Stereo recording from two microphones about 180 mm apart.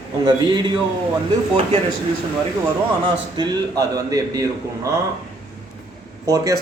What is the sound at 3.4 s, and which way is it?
A man's voice, 20° right (ahead or behind).